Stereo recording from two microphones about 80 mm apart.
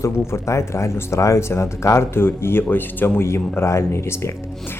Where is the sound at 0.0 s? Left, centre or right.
Left.